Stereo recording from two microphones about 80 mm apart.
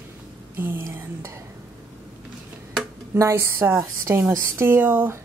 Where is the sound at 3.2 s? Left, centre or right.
Right.